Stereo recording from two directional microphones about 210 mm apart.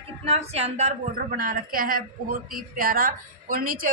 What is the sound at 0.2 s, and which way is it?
A woman's voice, 30° right (ahead or behind).